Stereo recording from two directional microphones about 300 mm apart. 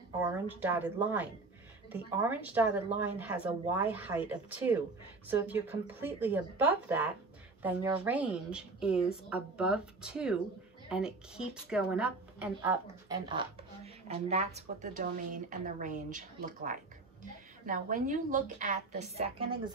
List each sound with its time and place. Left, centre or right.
0.2 s a woman's voice: centre